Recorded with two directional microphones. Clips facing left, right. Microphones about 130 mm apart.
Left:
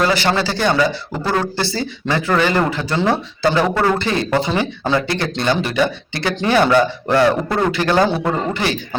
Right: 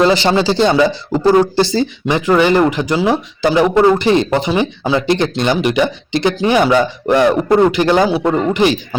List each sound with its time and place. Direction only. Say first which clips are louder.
0.0 s a man's voice: right 5 dB; 20° right (ahead or behind)